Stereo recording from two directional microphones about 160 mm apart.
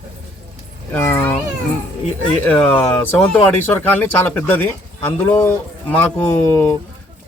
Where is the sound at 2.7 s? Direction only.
10° left (ahead or behind).